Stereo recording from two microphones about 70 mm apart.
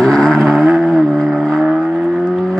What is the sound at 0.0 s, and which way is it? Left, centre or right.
Vehicle, centre.